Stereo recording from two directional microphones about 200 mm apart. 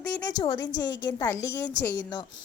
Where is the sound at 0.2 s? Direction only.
20° left (ahead or behind).